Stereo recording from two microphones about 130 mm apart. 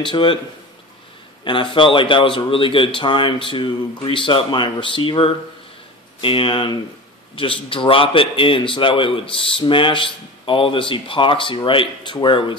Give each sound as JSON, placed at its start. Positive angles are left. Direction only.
{"t": 0.0, "sound": "a man's voice", "side_deg": 40}
{"t": 1.4, "sound": "a man's voice", "side_deg": 40}